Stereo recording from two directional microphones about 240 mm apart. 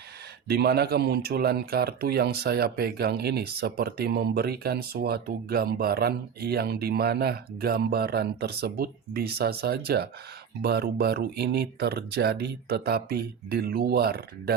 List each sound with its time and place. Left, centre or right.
0.4 s speech: right